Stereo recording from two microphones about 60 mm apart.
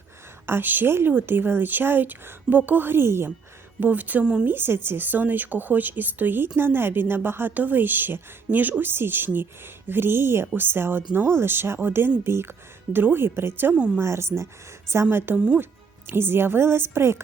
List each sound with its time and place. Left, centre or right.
0.4 s speech: right
3.8 s speech: right
13.7 s speech: centre
14.0 s speech: right
15.3 s speech: right